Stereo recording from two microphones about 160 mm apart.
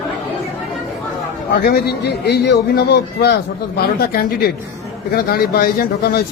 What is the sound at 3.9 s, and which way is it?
Speech, 70° left (ahead or behind).